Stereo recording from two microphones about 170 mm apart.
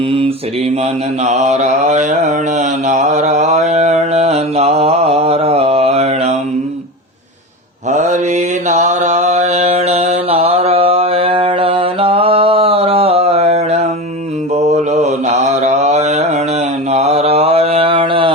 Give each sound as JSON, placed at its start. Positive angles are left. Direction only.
{"t": 1.2, "sound": "mantra", "side_deg": -40}
{"t": 7.9, "sound": "mantra", "side_deg": -45}